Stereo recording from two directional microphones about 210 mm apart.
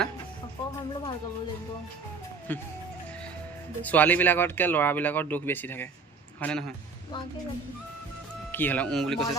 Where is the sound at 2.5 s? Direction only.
10° left (ahead or behind).